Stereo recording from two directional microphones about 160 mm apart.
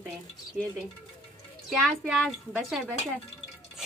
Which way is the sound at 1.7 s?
Centre (ahead or behind).